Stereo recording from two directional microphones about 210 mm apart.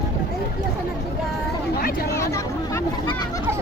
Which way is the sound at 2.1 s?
15° left (ahead or behind).